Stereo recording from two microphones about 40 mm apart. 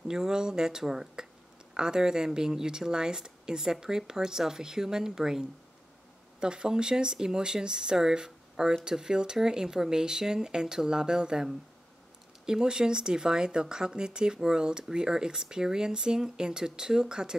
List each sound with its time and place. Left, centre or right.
0.1 s speech: centre
6.4 s speech: right
12.4 s speech: centre